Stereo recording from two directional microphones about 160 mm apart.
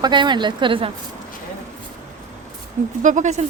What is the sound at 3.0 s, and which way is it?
Speech, 50° right (ahead or behind).